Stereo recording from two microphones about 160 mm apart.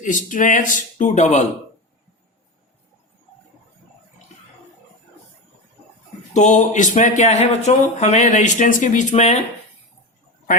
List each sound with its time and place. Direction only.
0.0 s speech: 55° left (ahead or behind)
6.3 s speech: 50° left (ahead or behind)